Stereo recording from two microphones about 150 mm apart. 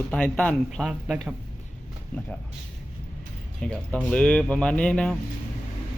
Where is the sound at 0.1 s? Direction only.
10° left (ahead or behind).